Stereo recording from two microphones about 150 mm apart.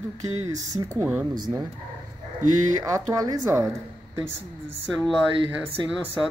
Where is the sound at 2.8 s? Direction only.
25° right (ahead or behind).